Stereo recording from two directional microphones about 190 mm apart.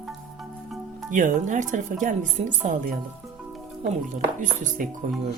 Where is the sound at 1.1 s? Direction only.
40° right (ahead or behind).